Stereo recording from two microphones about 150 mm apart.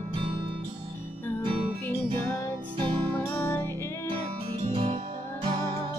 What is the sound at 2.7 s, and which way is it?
Music, 30° right (ahead or behind).